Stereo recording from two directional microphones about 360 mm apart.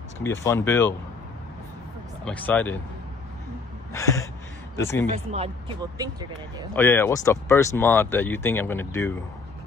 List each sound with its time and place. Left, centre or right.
0.2 s speech: centre
2.2 s speech: centre
3.9 s speech: centre
5.1 s speech: centre
6.7 s speech: centre